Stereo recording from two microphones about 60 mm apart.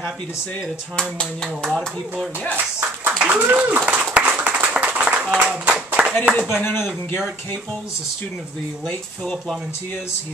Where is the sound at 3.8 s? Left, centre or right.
Right.